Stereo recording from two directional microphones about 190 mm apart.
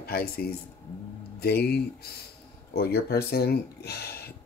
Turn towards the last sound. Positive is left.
turn(degrees=55)  # may be behind; listen again after turning